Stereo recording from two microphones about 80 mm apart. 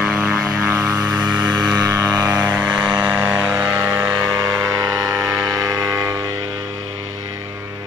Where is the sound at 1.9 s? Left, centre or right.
Right.